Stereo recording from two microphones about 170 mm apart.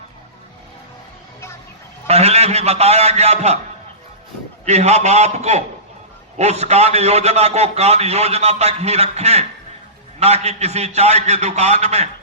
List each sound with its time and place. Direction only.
2.0 s a man's voice: 40° right (ahead or behind)
4.6 s a man's voice: 40° right (ahead or behind)